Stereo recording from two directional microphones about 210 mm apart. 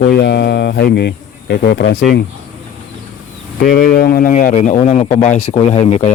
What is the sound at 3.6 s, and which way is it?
Speech, 45° left (ahead or behind).